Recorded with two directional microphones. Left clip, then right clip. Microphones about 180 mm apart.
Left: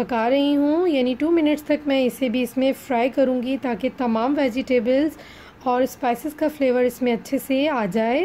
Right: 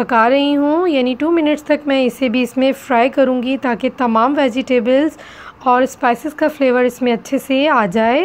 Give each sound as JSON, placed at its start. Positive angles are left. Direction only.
{"t": 0.0, "sound": "a woman's voice", "side_deg": -5}